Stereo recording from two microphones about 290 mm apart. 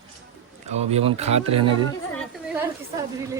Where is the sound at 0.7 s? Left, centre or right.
Right.